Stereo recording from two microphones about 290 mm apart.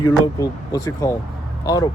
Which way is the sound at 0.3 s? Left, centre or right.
Centre.